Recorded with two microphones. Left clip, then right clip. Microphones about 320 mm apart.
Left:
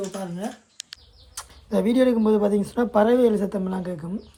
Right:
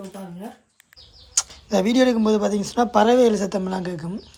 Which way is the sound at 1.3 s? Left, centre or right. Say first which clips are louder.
Right 4 dB; centre.